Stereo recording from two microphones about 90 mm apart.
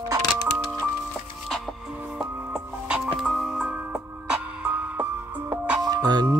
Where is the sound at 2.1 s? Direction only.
10° right (ahead or behind).